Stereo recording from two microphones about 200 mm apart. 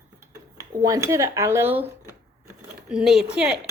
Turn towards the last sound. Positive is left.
turn(degrees=-5)  # may be behind; listen again after turning